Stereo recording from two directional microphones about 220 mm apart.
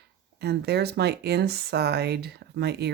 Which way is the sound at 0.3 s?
50° right (ahead or behind).